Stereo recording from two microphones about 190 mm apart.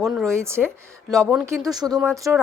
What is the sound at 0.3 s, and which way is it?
Speech, 15° right (ahead or behind).